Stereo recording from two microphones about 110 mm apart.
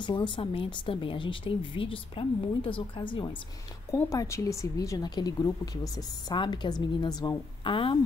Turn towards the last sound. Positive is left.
turn(degrees=50)  # may be behind; listen again after turning